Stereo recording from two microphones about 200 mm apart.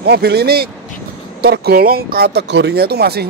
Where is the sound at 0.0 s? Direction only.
55° right (ahead or behind).